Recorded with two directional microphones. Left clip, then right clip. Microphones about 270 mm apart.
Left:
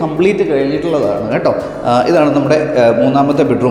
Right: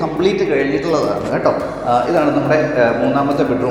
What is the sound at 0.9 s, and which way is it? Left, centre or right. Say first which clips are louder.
A man's voice: left 3 dB; left.